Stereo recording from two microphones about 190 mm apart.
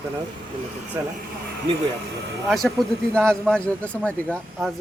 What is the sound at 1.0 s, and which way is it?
Speech, 20° right (ahead or behind).